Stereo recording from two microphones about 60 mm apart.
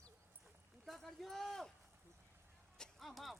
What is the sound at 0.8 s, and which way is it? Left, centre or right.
Speech, centre.